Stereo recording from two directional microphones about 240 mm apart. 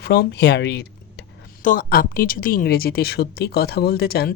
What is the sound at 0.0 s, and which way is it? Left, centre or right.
A woman's voice, left.